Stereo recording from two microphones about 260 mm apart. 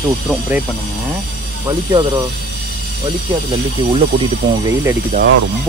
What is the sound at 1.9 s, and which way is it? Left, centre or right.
Speech, centre.